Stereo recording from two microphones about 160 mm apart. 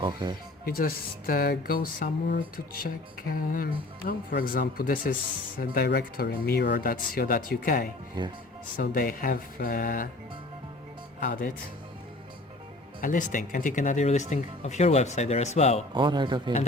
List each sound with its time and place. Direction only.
0.0 s a man's voice: 30° right (ahead or behind)
0.6 s speech: 65° left (ahead or behind)
2.8 s speech: 65° left (ahead or behind)
8.2 s a man's voice: 25° right (ahead or behind)
8.7 s speech: 60° left (ahead or behind)
11.2 s speech: 60° left (ahead or behind)
13.0 s speech: 55° left (ahead or behind)
16.0 s a man's voice: 30° right (ahead or behind)